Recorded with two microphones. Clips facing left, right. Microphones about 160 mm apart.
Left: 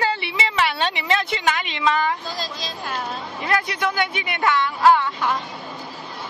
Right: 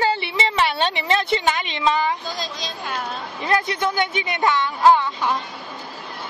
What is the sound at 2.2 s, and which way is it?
Speech, centre (ahead or behind).